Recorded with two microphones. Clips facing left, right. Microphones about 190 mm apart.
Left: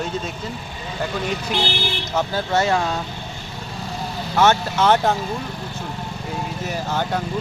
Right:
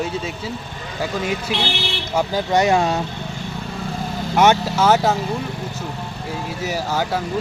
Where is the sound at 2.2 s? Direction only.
15° right (ahead or behind).